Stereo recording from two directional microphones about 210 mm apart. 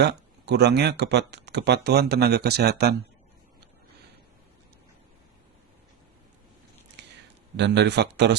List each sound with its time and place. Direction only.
0.0 s speech: 55° right (ahead or behind)
7.0 s a sound: 55° right (ahead or behind)
7.5 s speech: 55° right (ahead or behind)